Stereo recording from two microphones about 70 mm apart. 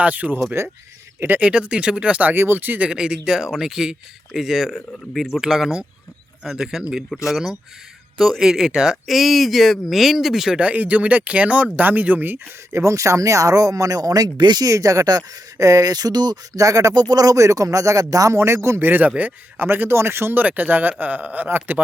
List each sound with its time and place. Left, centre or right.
0.0 s speech: right
0.6 s speech: right
1.4 s speech: centre
2.3 s speech: right; by 10.6 s centre
10.6 s speech: right
12.7 s speech: right
14.7 s speech: right
16.6 s speech: right
18.3 s speech: right
18.9 s speech: right